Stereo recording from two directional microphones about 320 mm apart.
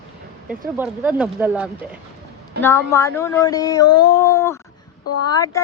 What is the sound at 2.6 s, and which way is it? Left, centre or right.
Speech, centre.